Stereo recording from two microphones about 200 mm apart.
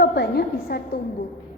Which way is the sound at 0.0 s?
55° left (ahead or behind).